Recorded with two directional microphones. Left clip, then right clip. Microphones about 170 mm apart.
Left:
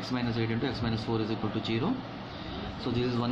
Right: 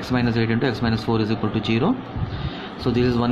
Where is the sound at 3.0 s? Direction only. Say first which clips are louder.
Right 10 dB; 50° right (ahead or behind).